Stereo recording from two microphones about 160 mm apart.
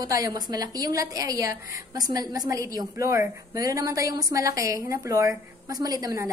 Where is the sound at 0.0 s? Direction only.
20° right (ahead or behind).